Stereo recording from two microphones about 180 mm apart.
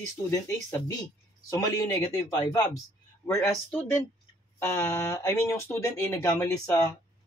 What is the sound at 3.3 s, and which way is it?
Speech, 10° left (ahead or behind).